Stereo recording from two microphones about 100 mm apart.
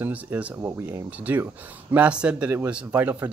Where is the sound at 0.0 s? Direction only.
15° right (ahead or behind).